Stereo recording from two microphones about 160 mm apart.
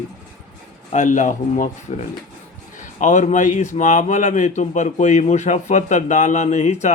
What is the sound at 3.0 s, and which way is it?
A man's voice, 50° left (ahead or behind).